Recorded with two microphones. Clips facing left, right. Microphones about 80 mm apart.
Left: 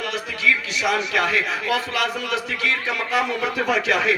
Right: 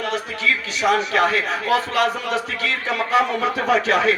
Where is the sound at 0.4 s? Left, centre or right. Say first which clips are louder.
Right 1 dB; right.